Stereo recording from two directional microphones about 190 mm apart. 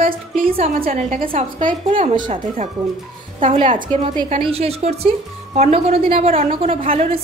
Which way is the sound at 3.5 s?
30° right (ahead or behind).